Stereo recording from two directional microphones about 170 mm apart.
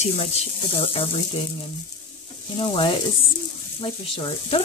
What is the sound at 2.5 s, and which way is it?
Speech, 30° left (ahead or behind).